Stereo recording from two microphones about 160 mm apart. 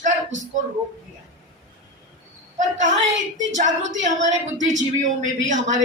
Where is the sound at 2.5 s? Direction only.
50° right (ahead or behind).